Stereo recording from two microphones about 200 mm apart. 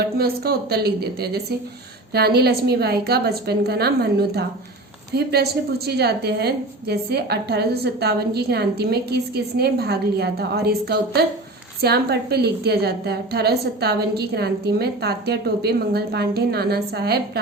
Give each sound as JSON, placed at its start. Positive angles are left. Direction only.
{"t": 0.2, "sound": "a woman's voice", "side_deg": -50}